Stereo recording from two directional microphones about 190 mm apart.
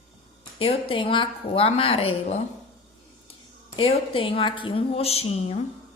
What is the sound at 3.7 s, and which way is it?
A woman's voice, 30° left (ahead or behind).